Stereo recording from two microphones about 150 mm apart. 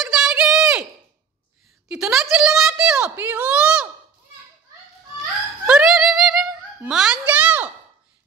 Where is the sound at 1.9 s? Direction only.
5° right (ahead or behind).